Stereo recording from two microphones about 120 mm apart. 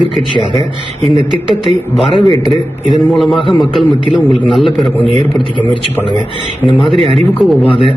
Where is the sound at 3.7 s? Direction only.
45° left (ahead or behind).